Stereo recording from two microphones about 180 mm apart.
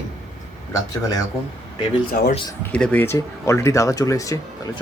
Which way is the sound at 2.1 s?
55° left (ahead or behind).